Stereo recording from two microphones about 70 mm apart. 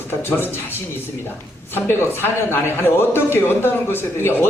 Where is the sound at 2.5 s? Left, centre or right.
Left.